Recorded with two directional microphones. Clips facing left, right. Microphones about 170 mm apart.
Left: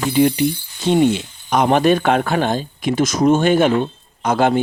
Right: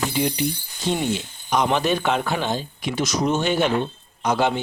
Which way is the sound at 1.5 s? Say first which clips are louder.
Left 6 dB; 55° left (ahead or behind).